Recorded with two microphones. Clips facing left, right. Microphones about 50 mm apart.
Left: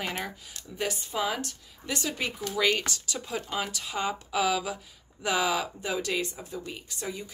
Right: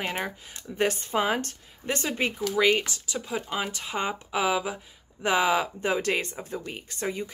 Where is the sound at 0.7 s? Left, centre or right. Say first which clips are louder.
Right 6 dB; right.